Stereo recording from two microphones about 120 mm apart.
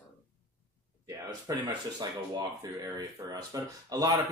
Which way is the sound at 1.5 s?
30° right (ahead or behind).